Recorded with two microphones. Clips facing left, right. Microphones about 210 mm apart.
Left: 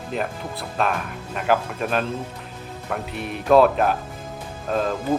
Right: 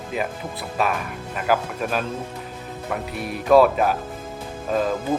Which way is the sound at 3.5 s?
5° right (ahead or behind).